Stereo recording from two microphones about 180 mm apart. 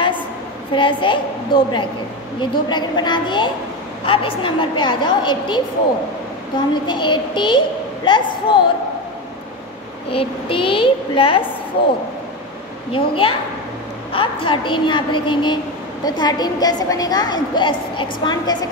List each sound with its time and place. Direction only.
0.7 s a woman's voice: 25° left (ahead or behind)
6.7 s a woman's voice: 25° left (ahead or behind)
10.1 s a woman's voice: 30° left (ahead or behind)
12.9 s a woman's voice: 30° left (ahead or behind)